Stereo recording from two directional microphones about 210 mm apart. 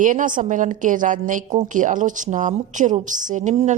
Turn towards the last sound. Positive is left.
turn(degrees=-35)  # may be behind; listen again after turning